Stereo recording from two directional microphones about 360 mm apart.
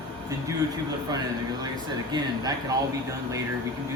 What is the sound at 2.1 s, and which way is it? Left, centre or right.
Speech, centre.